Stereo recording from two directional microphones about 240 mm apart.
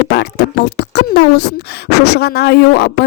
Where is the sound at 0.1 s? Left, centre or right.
Left.